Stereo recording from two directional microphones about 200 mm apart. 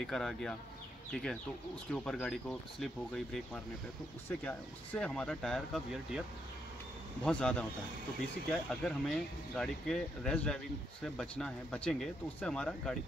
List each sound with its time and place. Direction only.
0.0 s speech: centre (ahead or behind)
1.9 s speech: 5° left (ahead or behind)
7.2 s speech: 5° left (ahead or behind)